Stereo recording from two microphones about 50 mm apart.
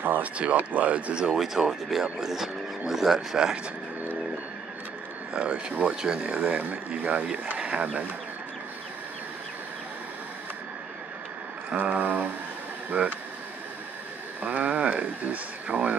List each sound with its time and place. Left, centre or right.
0.0 s speech: right
1.3 s speech: centre
5.3 s speech: right
11.7 s a sound: right
12.9 s speech: right
14.4 s a sound: right